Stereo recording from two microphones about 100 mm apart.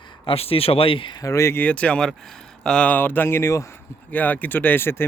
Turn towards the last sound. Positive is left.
turn(degrees=20)  # may be behind; listen again after turning